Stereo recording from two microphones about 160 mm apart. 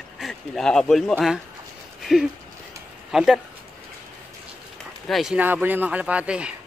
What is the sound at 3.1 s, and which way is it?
Speech, 5° right (ahead or behind).